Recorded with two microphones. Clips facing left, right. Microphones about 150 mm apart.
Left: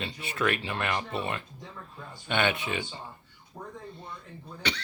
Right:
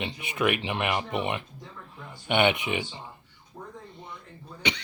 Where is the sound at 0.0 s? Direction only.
15° right (ahead or behind).